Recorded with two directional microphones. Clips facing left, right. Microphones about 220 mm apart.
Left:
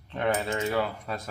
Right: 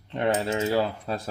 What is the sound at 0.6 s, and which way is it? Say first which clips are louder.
Cutlery: right 3 dB; 30° right (ahead or behind).